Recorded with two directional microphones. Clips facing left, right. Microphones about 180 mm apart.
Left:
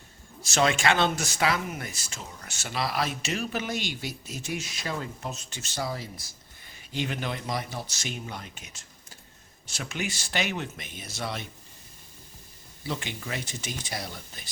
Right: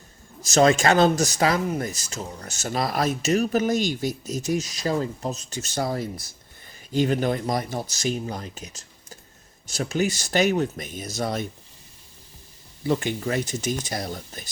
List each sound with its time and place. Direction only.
0.4 s speech: 40° right (ahead or behind)
12.9 s speech: 45° right (ahead or behind)